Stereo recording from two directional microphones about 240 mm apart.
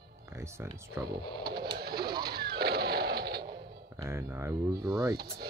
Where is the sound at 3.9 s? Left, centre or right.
Centre.